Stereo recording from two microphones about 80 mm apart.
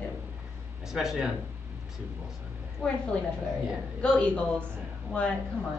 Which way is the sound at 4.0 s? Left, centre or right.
Centre.